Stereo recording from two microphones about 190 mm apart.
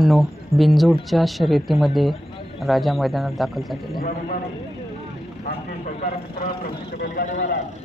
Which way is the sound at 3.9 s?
50° left (ahead or behind).